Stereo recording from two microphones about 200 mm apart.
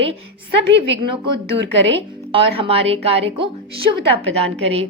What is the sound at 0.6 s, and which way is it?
A woman's voice, 60° right (ahead or behind).